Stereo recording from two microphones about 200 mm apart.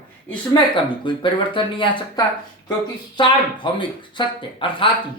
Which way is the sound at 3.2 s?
25° left (ahead or behind).